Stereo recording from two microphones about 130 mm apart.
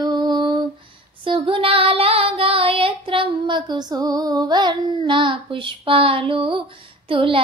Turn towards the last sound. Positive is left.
turn(degrees=-45)  # may be behind; listen again after turning